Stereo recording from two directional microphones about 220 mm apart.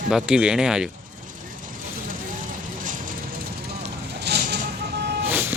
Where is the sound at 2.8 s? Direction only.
35° right (ahead or behind).